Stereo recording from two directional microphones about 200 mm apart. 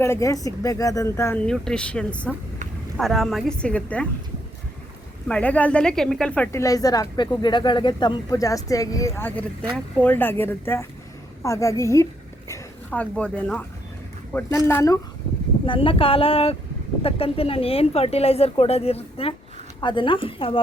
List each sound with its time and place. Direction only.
0.0 s a woman's voice: 15° left (ahead or behind)
5.3 s speech: 5° left (ahead or behind)
15.6 s speech: 25° left (ahead or behind)